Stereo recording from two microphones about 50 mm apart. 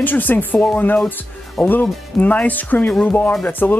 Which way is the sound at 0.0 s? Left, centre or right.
Left.